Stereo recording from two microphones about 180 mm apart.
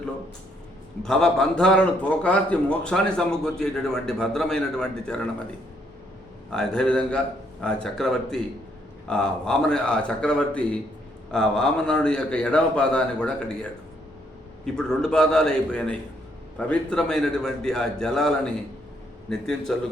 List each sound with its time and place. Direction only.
1.0 s a man's voice: 5° left (ahead or behind)
6.5 s a man's voice: 5° left (ahead or behind)